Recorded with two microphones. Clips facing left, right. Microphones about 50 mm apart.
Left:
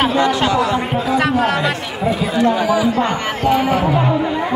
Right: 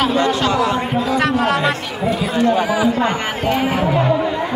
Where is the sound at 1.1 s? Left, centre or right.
Centre.